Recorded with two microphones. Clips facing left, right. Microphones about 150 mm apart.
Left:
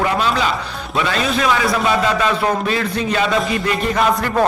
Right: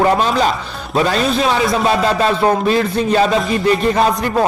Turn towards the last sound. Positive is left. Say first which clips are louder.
# right 4 dB
turn(degrees=-35)  # may be behind; listen again after turning